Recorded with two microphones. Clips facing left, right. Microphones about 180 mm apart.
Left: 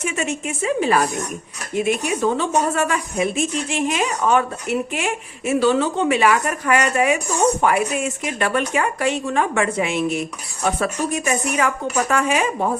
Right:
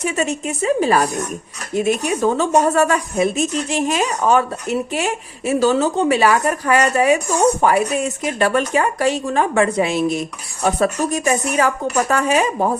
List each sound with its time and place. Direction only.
0.0 s speech: 35° right (ahead or behind)